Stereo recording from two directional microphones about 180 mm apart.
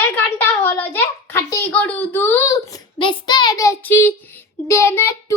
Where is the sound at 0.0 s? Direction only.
10° left (ahead or behind).